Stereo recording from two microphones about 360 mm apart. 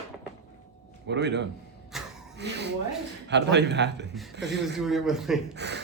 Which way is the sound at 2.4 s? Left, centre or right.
Right.